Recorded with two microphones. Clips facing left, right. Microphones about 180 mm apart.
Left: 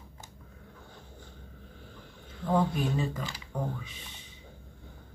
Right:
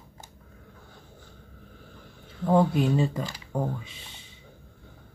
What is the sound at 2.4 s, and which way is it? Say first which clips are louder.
Speech: right 6 dB; 30° right (ahead or behind).